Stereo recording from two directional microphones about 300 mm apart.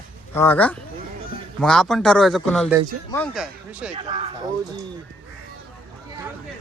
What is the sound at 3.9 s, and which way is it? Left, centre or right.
Speech, centre.